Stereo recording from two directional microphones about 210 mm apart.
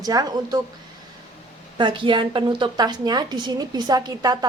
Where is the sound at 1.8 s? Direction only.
25° right (ahead or behind).